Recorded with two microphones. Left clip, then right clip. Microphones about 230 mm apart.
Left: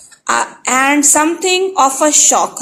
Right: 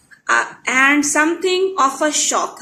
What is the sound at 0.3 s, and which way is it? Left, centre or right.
A woman's voice, centre.